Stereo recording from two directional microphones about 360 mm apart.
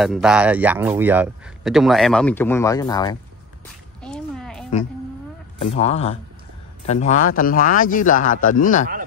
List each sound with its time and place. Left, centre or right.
0.0 s speech: centre
4.0 s a sound: centre
5.8 s a man's voice: centre